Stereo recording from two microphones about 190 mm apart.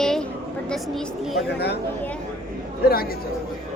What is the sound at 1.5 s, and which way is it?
Speech, 60° left (ahead or behind).